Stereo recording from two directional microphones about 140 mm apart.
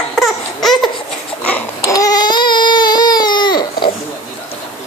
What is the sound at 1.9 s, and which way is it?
Baby cry, 25° left (ahead or behind).